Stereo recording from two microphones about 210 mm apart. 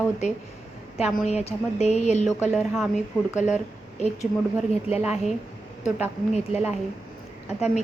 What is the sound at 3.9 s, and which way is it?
Speech, 30° left (ahead or behind).